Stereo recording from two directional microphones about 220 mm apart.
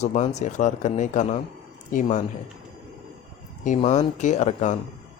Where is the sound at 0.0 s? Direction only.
30° left (ahead or behind).